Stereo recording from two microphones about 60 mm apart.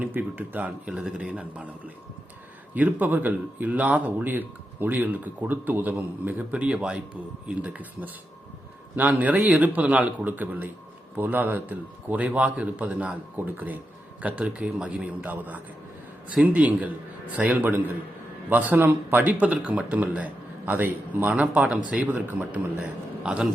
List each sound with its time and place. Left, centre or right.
0.0 s speech: right
0.9 s speech: centre
2.7 s a man's voice: right